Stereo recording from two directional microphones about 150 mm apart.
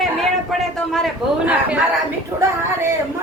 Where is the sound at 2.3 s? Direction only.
25° right (ahead or behind).